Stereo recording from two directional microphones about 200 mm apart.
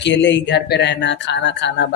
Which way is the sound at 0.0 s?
65° left (ahead or behind).